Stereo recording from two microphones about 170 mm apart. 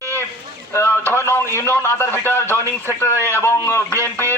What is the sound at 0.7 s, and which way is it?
A man's voice, 15° left (ahead or behind).